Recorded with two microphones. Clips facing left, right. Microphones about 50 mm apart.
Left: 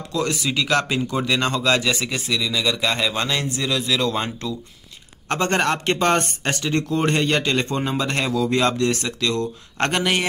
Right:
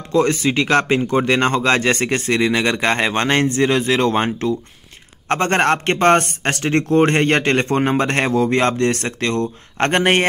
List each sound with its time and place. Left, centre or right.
0.1 s a man's voice: right